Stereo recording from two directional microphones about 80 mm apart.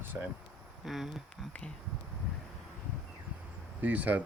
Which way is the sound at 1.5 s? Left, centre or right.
Centre.